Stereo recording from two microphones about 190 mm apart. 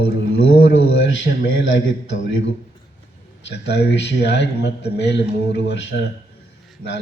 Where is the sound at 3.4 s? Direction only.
65° left (ahead or behind).